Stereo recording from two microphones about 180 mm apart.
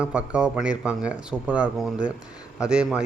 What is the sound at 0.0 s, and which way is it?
Speech, 5° right (ahead or behind).